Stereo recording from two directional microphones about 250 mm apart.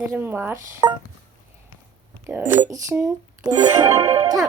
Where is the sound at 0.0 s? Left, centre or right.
Centre.